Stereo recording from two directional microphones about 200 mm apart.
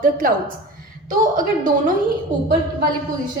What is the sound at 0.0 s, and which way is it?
Speech, 45° right (ahead or behind).